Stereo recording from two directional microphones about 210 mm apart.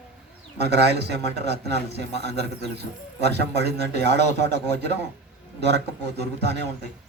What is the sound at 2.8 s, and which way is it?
A man's voice, 50° right (ahead or behind).